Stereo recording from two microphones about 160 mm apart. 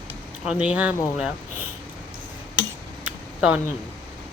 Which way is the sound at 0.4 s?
5° right (ahead or behind).